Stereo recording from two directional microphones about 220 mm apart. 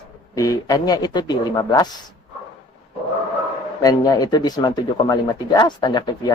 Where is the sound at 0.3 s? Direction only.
15° left (ahead or behind).